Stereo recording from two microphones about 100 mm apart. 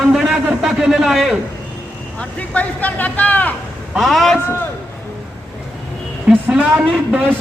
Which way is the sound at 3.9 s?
Centre (ahead or behind).